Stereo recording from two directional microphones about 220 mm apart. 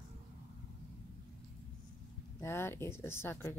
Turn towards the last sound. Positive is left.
turn(degrees=10)  # may be behind; listen again after turning